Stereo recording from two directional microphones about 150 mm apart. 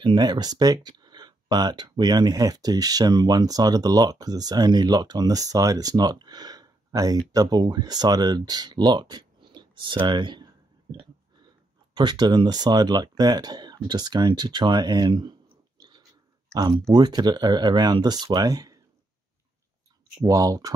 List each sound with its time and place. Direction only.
0.0 s speech: 30° right (ahead or behind)
15.8 s dog: 25° right (ahead or behind)
16.9 s speech: 30° right (ahead or behind)
20.2 s speech: 25° right (ahead or behind)